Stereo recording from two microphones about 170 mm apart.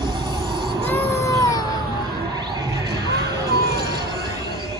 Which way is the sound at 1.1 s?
20° left (ahead or behind).